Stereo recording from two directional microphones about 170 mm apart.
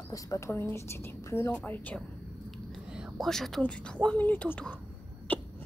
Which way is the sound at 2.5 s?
5° right (ahead or behind).